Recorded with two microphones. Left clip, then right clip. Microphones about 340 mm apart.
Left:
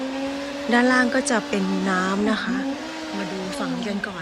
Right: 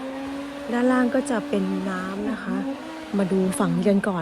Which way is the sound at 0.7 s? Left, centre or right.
Centre.